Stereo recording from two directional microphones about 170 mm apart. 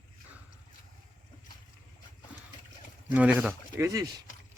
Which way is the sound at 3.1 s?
5° right (ahead or behind).